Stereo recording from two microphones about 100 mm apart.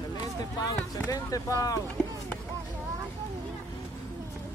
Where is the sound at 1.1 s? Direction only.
35° left (ahead or behind).